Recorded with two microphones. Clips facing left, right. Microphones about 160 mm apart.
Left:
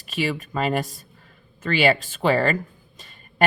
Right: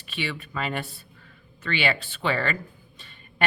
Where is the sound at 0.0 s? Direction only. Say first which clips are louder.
Left 7 dB; 40° left (ahead or behind).